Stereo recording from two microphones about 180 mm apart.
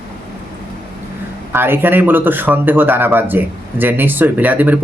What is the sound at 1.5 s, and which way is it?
Speech, 10° right (ahead or behind).